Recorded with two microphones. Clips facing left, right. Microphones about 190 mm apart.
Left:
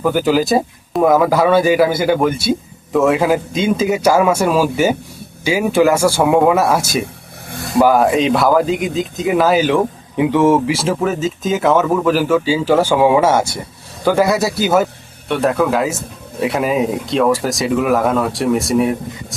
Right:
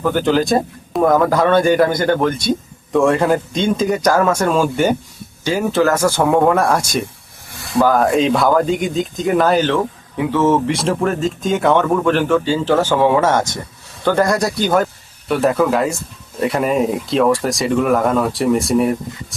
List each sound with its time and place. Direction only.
0.0 s speech: 5° left (ahead or behind)